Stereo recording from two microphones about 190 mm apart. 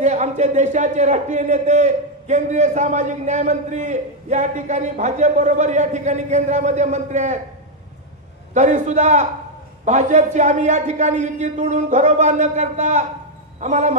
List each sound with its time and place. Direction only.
0.0 s a man's voice: 40° right (ahead or behind)
8.5 s a man's voice: 40° right (ahead or behind)